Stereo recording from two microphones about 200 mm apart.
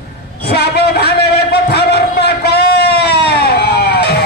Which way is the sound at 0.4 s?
55° left (ahead or behind).